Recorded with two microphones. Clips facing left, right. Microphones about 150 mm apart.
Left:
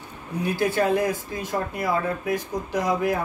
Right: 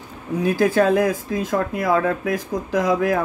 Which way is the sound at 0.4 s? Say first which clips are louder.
Right 5 dB; 90° right.